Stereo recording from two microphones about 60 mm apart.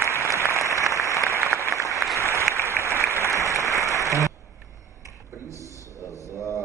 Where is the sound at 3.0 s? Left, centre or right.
Left.